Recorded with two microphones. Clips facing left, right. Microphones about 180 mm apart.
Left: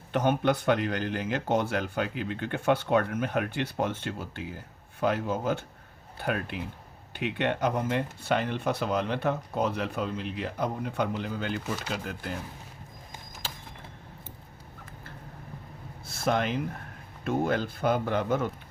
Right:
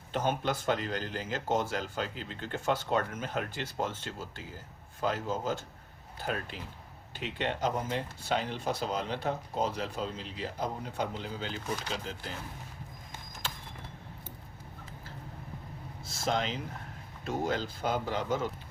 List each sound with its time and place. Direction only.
0.1 s speech: 60° left (ahead or behind)
16.0 s a sound: 60° left (ahead or behind)
17.2 s speech: 55° left (ahead or behind)